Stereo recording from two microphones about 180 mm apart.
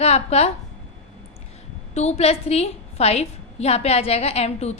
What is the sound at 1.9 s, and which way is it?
A woman's voice, 35° left (ahead or behind).